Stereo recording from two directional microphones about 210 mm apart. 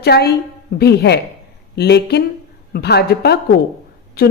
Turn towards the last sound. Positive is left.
turn(degrees=50)  # may be behind; listen again after turning